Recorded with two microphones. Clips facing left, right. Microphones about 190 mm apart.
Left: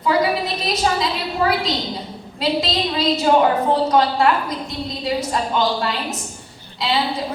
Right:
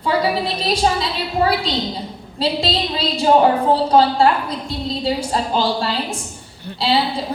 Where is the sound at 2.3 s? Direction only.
30° right (ahead or behind).